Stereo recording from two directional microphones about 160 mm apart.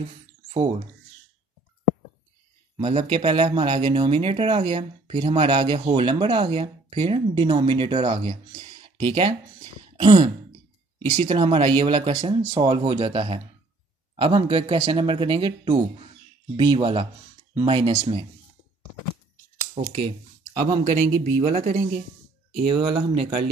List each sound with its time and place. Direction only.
0.5 s speech: 40° right (ahead or behind)
2.8 s speech: 40° right (ahead or behind)
19.9 s speech: 35° right (ahead or behind)
21.5 s speech: 60° right (ahead or behind)
22.7 s speech: 35° right (ahead or behind)